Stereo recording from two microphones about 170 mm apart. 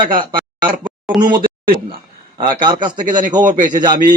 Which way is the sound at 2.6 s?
25° right (ahead or behind).